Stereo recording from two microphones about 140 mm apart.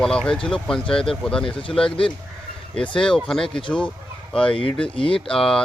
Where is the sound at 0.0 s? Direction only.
5° left (ahead or behind).